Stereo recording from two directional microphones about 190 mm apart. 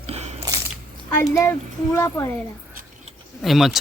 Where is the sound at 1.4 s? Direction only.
15° left (ahead or behind).